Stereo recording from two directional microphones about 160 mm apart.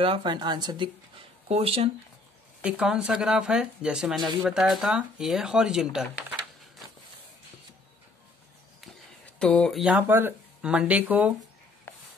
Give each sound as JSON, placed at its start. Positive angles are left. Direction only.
{"t": 0.0, "sound": "speech", "side_deg": -30}
{"t": 2.6, "sound": "speech", "side_deg": -5}
{"t": 9.4, "sound": "speech", "side_deg": 5}